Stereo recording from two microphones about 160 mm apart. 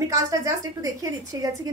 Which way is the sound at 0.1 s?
20° right (ahead or behind).